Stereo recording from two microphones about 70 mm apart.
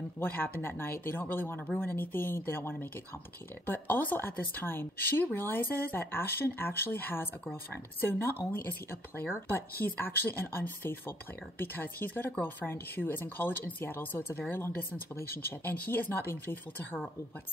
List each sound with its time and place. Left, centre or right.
0.2 s a woman's voice: left